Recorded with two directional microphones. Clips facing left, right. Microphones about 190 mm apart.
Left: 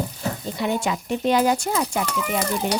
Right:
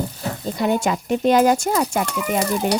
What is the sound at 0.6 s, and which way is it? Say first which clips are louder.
A woman's voice: right 4 dB; 45° right (ahead or behind).